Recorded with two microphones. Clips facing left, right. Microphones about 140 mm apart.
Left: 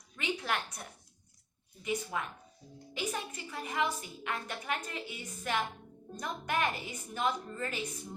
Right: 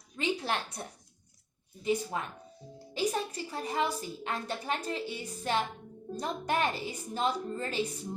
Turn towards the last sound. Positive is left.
turn(degrees=-30)  # may be behind; listen again after turning